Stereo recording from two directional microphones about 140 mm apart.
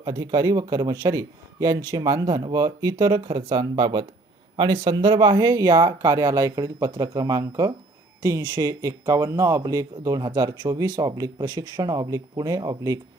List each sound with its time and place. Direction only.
0.0 s speech: 30° right (ahead or behind)